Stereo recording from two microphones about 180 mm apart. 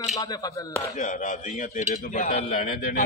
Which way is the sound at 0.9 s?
45° left (ahead or behind).